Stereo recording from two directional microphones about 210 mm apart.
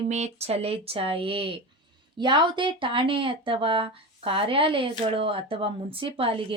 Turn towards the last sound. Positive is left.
turn(degrees=-25)  # may be behind; listen again after turning